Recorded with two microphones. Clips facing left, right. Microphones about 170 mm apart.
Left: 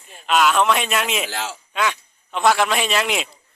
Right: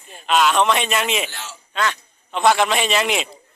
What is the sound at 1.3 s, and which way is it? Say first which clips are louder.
Speech: left 8 dB; 90° left.